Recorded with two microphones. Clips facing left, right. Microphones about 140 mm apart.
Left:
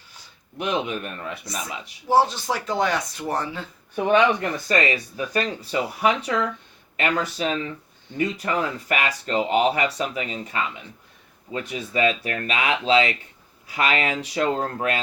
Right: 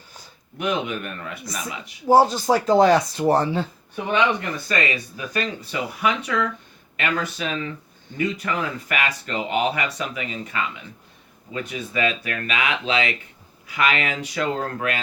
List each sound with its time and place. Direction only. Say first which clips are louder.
0.6 s speech: right 1 dB; 30° left (ahead or behind)
2.0 s speech: right 4 dB; 40° right (ahead or behind)
3.9 s speech: left 3 dB; 40° left (ahead or behind)